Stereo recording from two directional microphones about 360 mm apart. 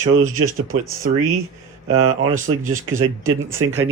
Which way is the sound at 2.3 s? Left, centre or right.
Right.